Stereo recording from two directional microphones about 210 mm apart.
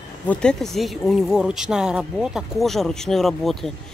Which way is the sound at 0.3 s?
5° left (ahead or behind).